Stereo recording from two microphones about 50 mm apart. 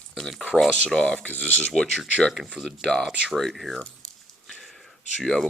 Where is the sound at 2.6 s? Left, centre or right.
Centre.